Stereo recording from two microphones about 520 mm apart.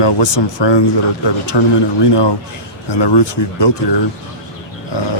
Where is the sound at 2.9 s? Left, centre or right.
Left.